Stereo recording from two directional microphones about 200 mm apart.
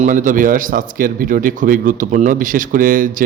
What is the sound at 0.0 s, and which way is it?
Speech, 40° right (ahead or behind).